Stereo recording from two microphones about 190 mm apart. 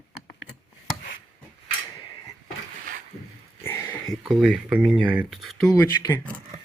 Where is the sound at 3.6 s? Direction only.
10° left (ahead or behind).